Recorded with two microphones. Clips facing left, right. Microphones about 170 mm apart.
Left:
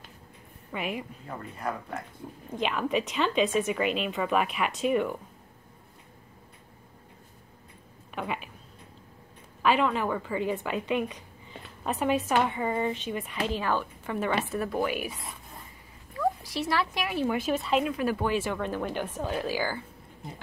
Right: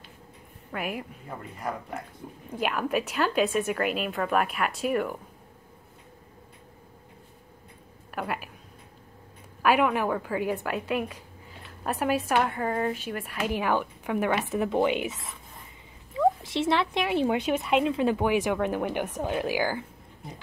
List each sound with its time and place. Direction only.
0.7 s a woman's voice: 5° right (ahead or behind)
2.5 s speech: 5° right (ahead or behind)
8.1 s a sound: 5° right (ahead or behind)
9.6 s a woman's voice: 10° right (ahead or behind)